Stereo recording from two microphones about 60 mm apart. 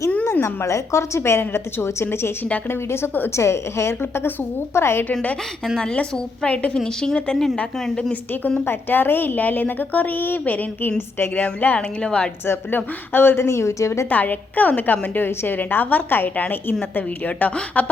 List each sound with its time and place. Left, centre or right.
0.4 s a woman's voice: left
5.8 s a woman's voice: centre
6.7 s a woman's voice: centre
8.6 s a woman's voice: left
12.0 s a woman's voice: centre
12.5 s a woman's voice: left
13.5 s a woman's voice: left
14.1 s a woman's voice: left